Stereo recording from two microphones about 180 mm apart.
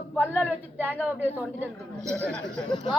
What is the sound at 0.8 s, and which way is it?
A woman's voice, 10° left (ahead or behind).